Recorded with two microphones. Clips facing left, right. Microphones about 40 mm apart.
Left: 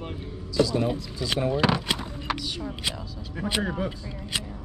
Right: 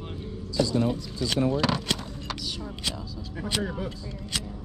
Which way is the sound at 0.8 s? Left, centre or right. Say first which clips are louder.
Even; centre.